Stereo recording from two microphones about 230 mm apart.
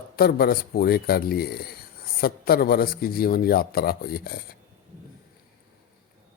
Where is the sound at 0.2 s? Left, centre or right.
Left.